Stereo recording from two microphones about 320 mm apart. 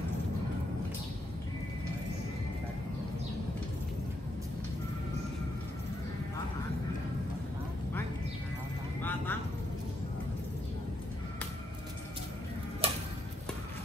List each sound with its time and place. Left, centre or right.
9.0 s vehicle: centre
12.8 s tick-tock: centre